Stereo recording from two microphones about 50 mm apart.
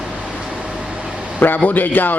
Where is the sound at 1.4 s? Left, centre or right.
Left.